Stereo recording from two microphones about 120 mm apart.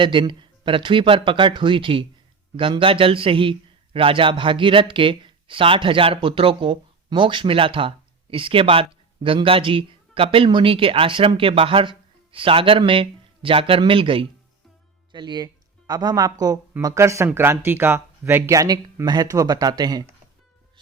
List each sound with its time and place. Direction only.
0.0 s speech: 45° right (ahead or behind)